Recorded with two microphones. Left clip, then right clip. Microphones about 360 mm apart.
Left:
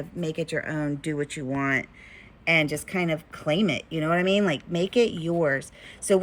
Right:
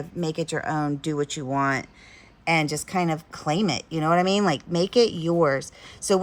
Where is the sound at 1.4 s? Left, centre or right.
Right.